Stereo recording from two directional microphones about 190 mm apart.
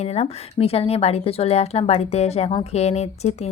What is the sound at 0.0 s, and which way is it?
A woman's voice, 35° left (ahead or behind).